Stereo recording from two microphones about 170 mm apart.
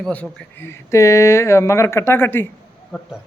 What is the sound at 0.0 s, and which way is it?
Speech, 5° left (ahead or behind).